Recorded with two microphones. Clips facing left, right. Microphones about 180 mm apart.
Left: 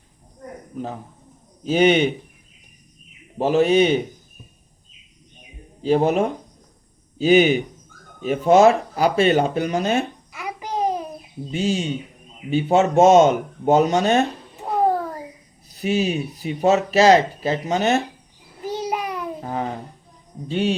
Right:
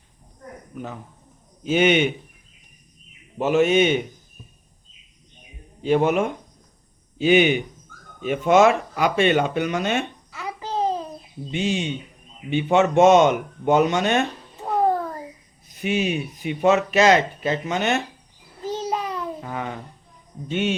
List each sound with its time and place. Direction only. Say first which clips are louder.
0.7 s speech: left 4 dB; 35° left (ahead or behind)
3.3 s speech: left 1 dB; 35° left (ahead or behind)
5.8 s speech: left 1 dB; 35° left (ahead or behind)
10.3 s babbling: even; 15° left (ahead or behind)
11.5 s speech: left 2 dB; 40° left (ahead or behind)
15.6 s speech: left 2 dB; 35° left (ahead or behind)
18.6 s babbling: left 1 dB; 15° left (ahead or behind)
19.4 s babbling: left 4 dB; 35° left (ahead or behind)
20.5 s speech: left 2 dB; 35° left (ahead or behind)